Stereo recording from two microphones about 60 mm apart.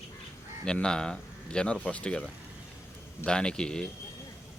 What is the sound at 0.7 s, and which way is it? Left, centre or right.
Speech, centre.